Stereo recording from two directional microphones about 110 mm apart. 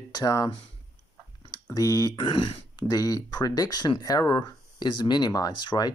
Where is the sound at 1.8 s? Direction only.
35° left (ahead or behind).